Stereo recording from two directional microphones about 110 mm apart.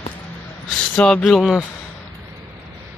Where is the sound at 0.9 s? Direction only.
10° left (ahead or behind).